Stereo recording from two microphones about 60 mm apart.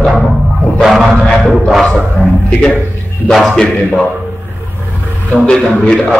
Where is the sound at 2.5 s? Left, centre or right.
Centre.